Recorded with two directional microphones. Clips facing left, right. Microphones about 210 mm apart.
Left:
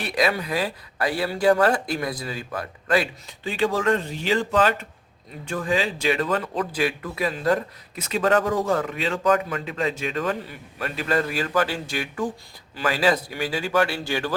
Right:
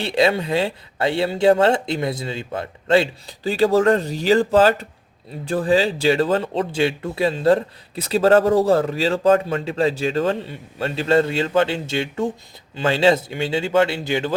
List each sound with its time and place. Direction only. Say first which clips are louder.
0.0 s speech: right 5 dB; 25° right (ahead or behind)